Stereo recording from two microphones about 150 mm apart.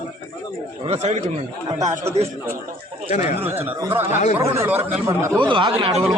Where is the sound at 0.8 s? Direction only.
45° right (ahead or behind).